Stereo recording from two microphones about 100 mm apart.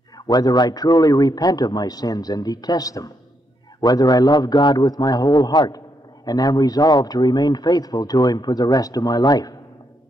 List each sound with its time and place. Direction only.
0.3 s a man's voice: 40° left (ahead or behind)